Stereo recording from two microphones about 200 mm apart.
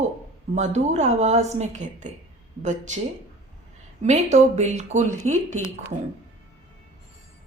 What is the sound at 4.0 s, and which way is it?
A woman's voice, 35° right (ahead or behind).